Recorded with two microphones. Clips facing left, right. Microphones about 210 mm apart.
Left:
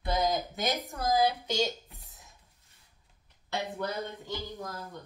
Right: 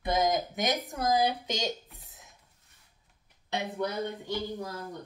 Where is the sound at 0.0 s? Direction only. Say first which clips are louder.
Right 2 dB; 15° right (ahead or behind).